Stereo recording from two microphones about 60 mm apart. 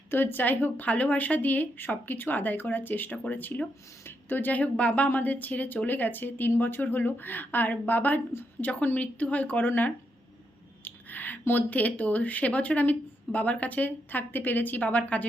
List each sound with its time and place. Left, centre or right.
0.1 s speech: left